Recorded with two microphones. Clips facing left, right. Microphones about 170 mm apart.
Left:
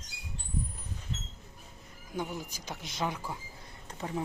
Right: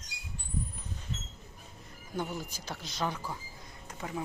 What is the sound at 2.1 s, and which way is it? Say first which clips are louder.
Speech: even; 10° left (ahead or behind).